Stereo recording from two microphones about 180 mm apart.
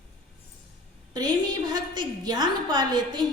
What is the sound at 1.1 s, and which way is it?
A woman's voice, 20° right (ahead or behind).